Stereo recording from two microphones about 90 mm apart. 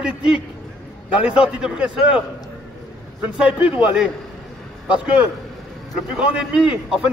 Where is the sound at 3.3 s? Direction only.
15° right (ahead or behind).